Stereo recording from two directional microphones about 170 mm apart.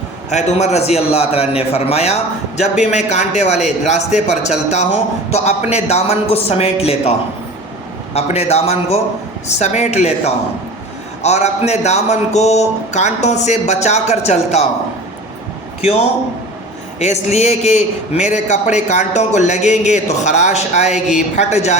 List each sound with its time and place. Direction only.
0.3 s speech: 40° left (ahead or behind)
8.1 s speech: 40° left (ahead or behind)
15.8 s a man's voice: 40° left (ahead or behind)